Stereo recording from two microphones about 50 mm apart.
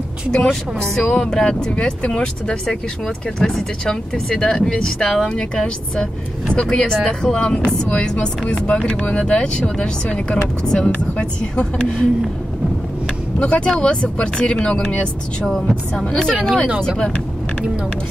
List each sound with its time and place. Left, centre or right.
0.3 s speech: centre
13.4 s speech: left